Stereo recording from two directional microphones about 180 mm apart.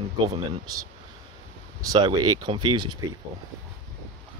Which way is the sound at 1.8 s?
20° right (ahead or behind).